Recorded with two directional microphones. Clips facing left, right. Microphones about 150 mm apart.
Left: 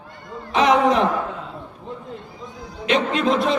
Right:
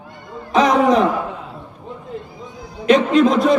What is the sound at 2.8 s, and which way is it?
Speech, 45° right (ahead or behind).